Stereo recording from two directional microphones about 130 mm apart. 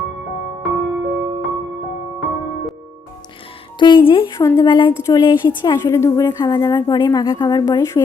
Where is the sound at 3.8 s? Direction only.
40° left (ahead or behind).